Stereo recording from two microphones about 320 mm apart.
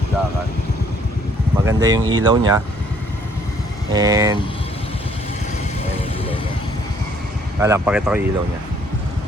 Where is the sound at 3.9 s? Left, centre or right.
Centre.